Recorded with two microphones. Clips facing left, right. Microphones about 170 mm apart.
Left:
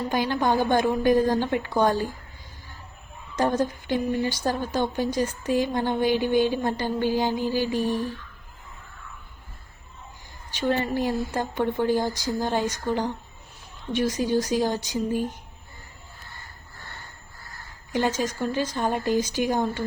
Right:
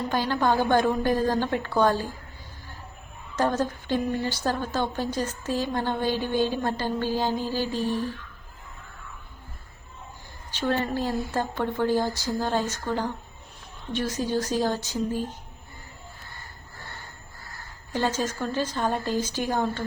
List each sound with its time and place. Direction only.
0.1 s speech: 15° left (ahead or behind)
3.3 s speech: 15° left (ahead or behind)
10.5 s speech: 15° left (ahead or behind)
17.9 s speech: 15° left (ahead or behind)